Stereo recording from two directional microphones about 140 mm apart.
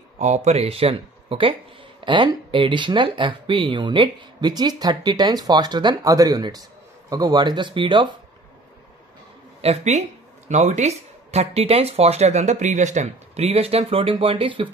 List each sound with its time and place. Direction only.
0.2 s speech: 55° right (ahead or behind); by 8.1 s 35° right (ahead or behind)
9.6 s speech: 50° right (ahead or behind)